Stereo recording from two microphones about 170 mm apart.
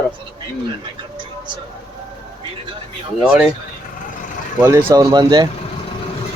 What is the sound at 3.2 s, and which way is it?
Speech, 5° right (ahead or behind).